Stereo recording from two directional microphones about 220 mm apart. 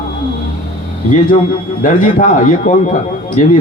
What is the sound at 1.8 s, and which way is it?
A man's voice, 35° left (ahead or behind).